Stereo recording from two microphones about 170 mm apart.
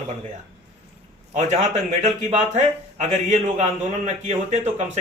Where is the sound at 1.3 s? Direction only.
40° right (ahead or behind).